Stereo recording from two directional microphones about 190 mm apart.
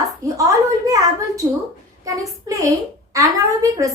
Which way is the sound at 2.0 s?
15° right (ahead or behind).